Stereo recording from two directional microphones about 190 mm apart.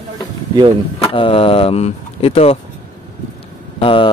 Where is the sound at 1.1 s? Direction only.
30° left (ahead or behind).